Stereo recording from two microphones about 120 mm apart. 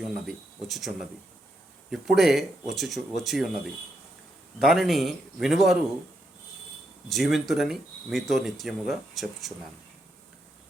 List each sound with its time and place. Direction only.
0.3 s speech: centre (ahead or behind)
4.6 s speech: centre (ahead or behind)
7.1 s speech: centre (ahead or behind)